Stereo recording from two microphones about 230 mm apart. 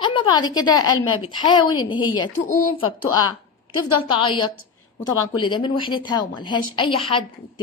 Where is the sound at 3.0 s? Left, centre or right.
Left.